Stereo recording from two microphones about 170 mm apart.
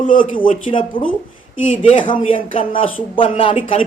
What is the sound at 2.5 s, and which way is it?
Speech, 30° left (ahead or behind).